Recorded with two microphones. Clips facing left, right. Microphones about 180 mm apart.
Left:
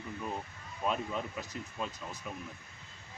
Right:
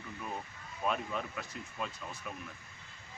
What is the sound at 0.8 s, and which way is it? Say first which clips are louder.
Speech: left 1 dB; 25° left (ahead or behind).